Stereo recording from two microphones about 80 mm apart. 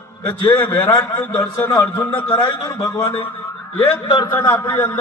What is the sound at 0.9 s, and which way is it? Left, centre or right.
Speech, left.